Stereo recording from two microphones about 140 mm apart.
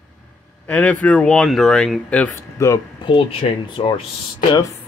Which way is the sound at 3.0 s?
35° left (ahead or behind).